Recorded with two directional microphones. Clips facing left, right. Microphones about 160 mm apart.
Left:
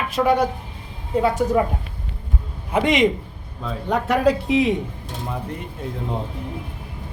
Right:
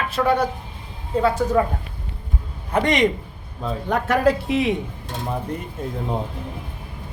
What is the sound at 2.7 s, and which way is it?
A man's voice, 5° left (ahead or behind).